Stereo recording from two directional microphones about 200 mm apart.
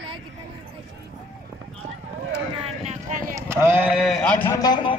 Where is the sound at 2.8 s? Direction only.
40° right (ahead or behind).